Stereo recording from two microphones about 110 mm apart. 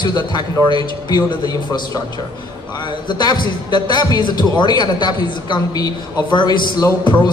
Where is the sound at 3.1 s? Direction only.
40° left (ahead or behind).